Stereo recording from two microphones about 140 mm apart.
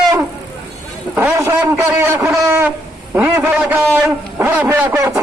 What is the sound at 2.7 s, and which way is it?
Speech, 15° right (ahead or behind).